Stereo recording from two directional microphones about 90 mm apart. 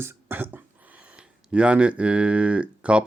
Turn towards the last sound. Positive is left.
turn(degrees=-10)  # may be behind; listen again after turning